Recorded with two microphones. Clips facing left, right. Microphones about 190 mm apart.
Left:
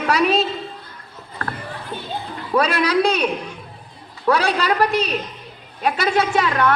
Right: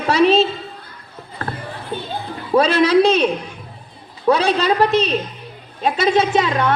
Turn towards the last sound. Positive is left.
turn(degrees=-20)  # may be behind; listen again after turning